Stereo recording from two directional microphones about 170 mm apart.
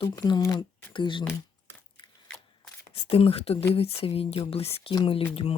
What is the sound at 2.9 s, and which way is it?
Speech, 35° left (ahead or behind).